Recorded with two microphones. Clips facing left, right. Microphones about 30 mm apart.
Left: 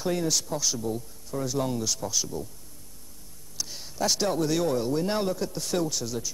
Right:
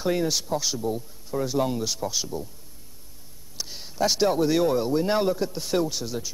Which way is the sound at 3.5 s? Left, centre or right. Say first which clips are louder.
Right 3 dB; centre.